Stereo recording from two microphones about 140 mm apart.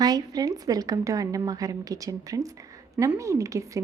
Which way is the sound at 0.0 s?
30° right (ahead or behind).